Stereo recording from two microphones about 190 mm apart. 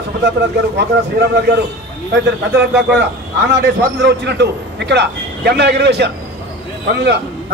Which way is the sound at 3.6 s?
65° right (ahead or behind).